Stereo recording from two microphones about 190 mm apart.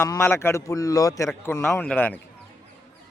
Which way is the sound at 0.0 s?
15° left (ahead or behind).